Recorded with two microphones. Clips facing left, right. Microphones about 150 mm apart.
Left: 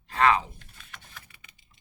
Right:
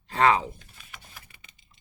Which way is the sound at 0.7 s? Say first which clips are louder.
Even; 5° right (ahead or behind).